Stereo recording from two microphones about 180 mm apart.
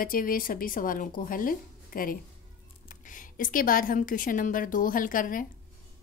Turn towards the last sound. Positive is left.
turn(degrees=50)  # may be behind; listen again after turning